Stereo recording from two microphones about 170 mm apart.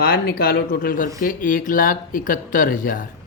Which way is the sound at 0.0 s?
60° left (ahead or behind).